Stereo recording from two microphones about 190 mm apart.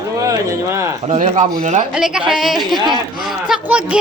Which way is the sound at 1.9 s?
5° right (ahead or behind).